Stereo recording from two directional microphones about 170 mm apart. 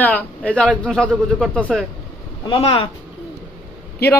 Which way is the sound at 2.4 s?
30° left (ahead or behind).